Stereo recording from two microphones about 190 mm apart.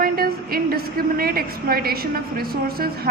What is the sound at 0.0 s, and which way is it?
A woman's voice, 50° right (ahead or behind).